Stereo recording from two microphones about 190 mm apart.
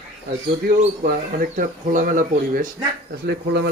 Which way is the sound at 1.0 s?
45° right (ahead or behind).